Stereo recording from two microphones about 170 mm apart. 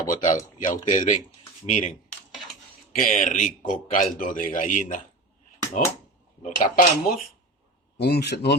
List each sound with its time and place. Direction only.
0.1 s a man's voice: 50° left (ahead or behind)
6.4 s a man's voice: 50° left (ahead or behind)
7.9 s a man's voice: 70° left (ahead or behind)